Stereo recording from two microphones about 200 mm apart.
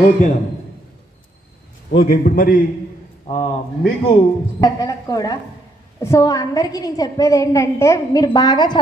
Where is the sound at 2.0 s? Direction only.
50° left (ahead or behind).